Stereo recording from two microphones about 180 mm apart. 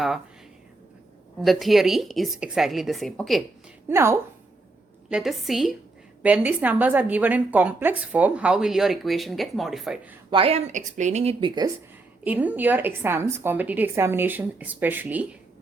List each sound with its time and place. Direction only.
1.4 s a woman's voice: centre (ahead or behind)
3.8 s a woman's voice: 15° right (ahead or behind)
5.0 s a woman's voice: 5° right (ahead or behind)
10.2 s speech: 30° right (ahead or behind)
12.2 s a woman's voice: 10° right (ahead or behind)